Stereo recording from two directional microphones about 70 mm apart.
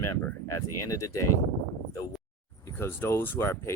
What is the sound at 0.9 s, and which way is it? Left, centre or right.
Speech, left.